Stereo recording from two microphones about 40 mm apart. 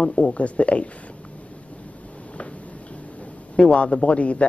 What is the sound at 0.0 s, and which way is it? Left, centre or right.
Speech, left.